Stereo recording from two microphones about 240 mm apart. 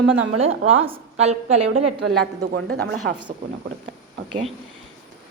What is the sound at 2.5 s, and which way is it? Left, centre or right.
Female singing, right.